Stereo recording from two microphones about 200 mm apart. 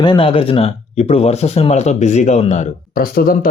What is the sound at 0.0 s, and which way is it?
Speech, 25° left (ahead or behind).